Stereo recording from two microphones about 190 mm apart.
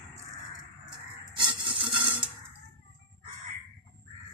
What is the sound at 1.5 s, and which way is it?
Rub, 25° right (ahead or behind).